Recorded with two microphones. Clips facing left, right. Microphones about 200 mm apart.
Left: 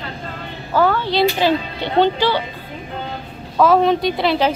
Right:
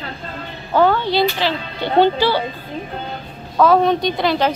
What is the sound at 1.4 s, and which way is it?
Speech, 15° left (ahead or behind).